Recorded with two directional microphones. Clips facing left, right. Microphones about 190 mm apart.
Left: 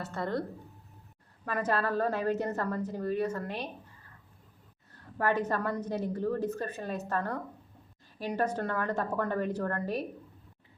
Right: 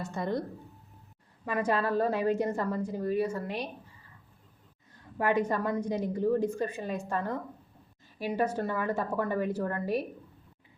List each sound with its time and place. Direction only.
0.0 s a woman's voice: 15° right (ahead or behind)
1.5 s a woman's voice: 10° right (ahead or behind)
4.9 s a woman's voice: 15° right (ahead or behind)